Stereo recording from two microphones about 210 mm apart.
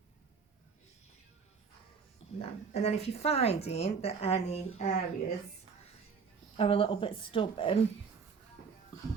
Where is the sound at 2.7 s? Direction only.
30° left (ahead or behind).